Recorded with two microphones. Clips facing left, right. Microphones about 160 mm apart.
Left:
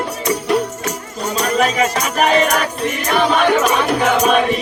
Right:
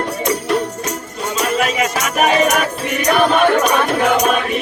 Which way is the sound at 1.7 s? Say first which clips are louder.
Left 1 dB; 35° left (ahead or behind).